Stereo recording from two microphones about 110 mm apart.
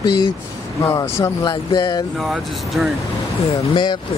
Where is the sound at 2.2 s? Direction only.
Centre (ahead or behind).